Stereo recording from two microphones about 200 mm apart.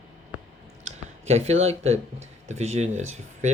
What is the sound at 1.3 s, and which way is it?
Speech, 30° right (ahead or behind).